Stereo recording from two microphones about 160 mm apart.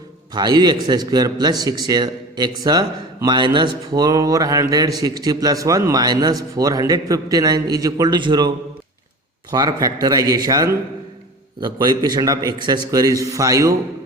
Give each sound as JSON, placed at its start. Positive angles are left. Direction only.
{"t": 0.3, "sound": "speech", "side_deg": -25}